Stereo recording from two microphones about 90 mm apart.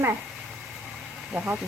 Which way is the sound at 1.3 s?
15° right (ahead or behind).